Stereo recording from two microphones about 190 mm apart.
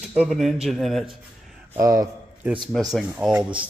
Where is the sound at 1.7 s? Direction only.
15° right (ahead or behind).